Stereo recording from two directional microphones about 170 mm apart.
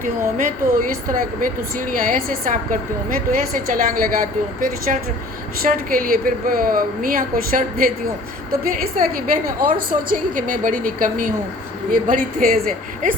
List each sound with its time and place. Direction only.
0.0 s a woman's voice: 55° right (ahead or behind)